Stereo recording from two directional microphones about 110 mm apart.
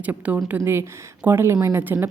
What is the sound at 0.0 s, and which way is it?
A woman's voice, 15° right (ahead or behind).